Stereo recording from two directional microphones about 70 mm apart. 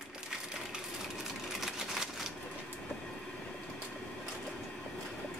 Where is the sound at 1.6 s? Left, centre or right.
Centre.